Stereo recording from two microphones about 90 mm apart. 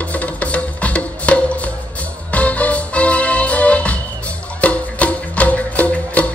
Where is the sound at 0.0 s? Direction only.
15° left (ahead or behind).